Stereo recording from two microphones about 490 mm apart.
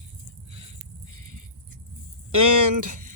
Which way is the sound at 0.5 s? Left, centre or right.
Right.